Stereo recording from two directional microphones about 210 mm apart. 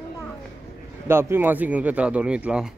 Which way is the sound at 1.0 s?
10° right (ahead or behind).